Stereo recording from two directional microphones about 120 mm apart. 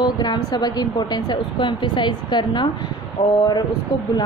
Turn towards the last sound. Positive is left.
turn(degrees=35)  # may be behind; listen again after turning